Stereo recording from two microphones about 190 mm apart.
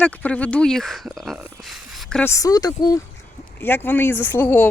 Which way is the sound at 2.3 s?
20° left (ahead or behind).